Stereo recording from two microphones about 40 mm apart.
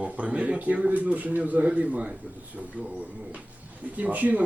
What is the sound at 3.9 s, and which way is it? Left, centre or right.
Speech, right.